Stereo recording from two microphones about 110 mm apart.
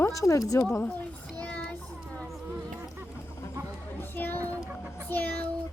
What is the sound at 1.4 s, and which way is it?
Child singing, 10° left (ahead or behind).